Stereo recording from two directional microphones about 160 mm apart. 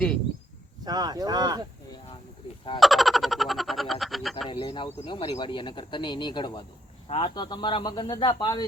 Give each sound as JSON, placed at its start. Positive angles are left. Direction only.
{"t": 0.9, "sound": "speech", "side_deg": -25}
{"t": 2.8, "sound": "a sound", "side_deg": 0}
{"t": 4.4, "sound": "speech", "side_deg": 30}